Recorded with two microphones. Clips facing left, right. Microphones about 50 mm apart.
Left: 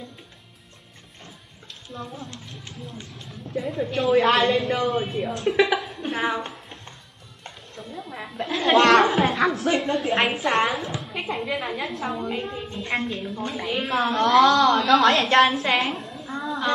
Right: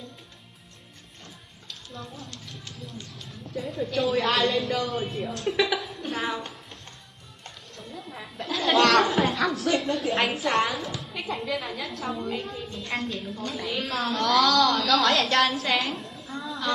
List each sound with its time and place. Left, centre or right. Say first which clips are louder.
1.9 s a woman's voice: left 5 dB; centre
4.9 s a woman's voice: left 4 dB; centre
5.6 s a woman's voice: left 5 dB; left
6.4 s a sound: left 4 dB; centre
7.7 s music: left 4 dB; centre
8.2 s a sound: left 3 dB; centre
9.9 s a woman's voice: left 3 dB; centre
10.7 s a woman's voice: left 4 dB; left
11.9 s a woman's voice: left 3 dB; centre
12.3 s a woman's voice: left 3 dB; left
16.0 s a sound: left 4 dB; centre